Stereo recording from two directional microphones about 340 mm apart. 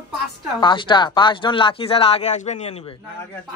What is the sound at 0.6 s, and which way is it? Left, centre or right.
Speech, centre.